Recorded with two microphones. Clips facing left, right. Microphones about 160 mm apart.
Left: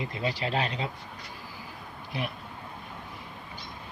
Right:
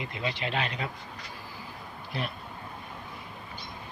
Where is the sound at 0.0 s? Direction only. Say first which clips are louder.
Left 2 dB; 35° left (ahead or behind).